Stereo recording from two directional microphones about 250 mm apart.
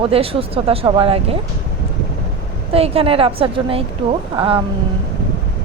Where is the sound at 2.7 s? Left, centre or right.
Right.